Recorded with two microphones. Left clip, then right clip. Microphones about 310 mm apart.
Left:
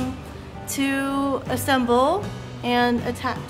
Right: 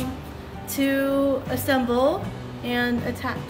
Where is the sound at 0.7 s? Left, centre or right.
Centre.